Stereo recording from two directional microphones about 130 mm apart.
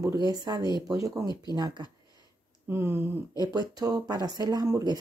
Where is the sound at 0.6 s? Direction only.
35° left (ahead or behind).